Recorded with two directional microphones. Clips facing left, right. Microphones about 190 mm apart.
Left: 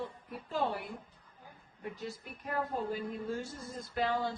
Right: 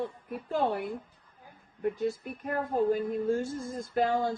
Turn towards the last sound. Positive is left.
turn(degrees=-45)  # may be behind; listen again after turning